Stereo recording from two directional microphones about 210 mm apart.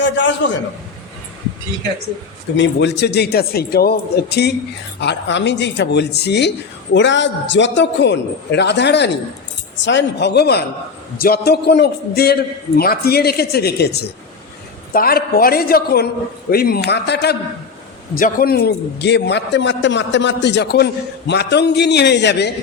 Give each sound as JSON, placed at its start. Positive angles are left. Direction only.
{"t": 0.0, "sound": "a man's voice", "side_deg": 60}
{"t": 2.6, "sound": "a man's voice", "side_deg": 55}